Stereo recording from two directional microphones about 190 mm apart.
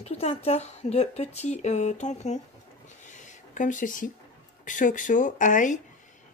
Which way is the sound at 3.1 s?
40° left (ahead or behind).